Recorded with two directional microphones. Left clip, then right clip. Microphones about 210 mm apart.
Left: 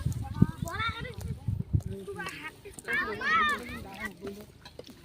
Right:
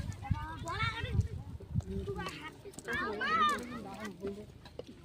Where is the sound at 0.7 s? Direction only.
55° right (ahead or behind).